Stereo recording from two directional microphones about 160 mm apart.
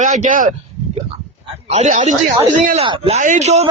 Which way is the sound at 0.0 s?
50° right (ahead or behind).